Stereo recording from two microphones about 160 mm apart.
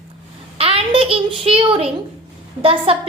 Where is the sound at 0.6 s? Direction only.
35° right (ahead or behind).